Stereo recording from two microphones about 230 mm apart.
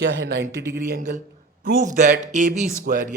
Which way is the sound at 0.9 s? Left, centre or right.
Right.